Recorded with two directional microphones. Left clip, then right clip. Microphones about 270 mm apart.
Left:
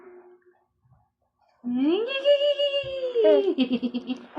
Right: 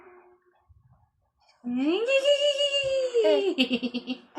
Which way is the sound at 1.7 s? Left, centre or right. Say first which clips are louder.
Right 1 dB; centre.